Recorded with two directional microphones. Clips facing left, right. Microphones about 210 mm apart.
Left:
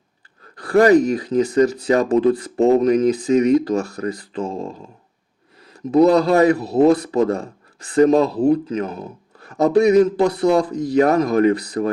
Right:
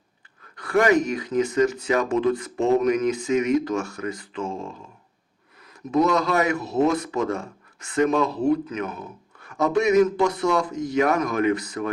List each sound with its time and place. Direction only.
0.5 s speech: 35° left (ahead or behind)